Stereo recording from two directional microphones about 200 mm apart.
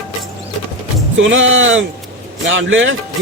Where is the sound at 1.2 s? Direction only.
70° right (ahead or behind).